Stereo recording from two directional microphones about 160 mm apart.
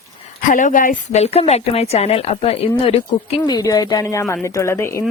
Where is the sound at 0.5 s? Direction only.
55° left (ahead or behind); by 3.4 s 40° left (ahead or behind).